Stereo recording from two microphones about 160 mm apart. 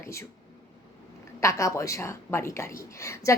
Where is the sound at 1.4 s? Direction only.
20° left (ahead or behind).